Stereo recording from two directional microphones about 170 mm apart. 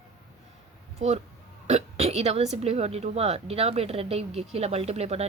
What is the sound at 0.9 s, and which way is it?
A woman's voice, 40° right (ahead or behind).